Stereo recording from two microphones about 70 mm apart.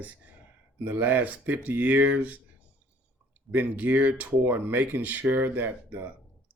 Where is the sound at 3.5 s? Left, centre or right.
Right.